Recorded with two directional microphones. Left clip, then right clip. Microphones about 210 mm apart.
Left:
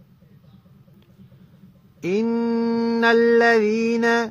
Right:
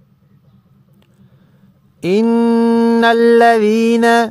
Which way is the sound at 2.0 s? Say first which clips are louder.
Right 9 dB; 45° right (ahead or behind).